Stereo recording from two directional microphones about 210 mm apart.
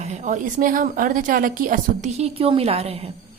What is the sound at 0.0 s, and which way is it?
A woman's voice, 35° right (ahead or behind).